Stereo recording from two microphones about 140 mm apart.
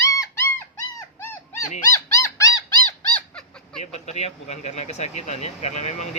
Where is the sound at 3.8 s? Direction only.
50° left (ahead or behind).